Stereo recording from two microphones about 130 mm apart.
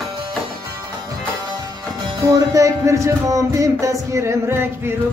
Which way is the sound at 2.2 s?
25° right (ahead or behind).